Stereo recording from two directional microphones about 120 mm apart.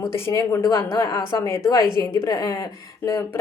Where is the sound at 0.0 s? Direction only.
25° left (ahead or behind).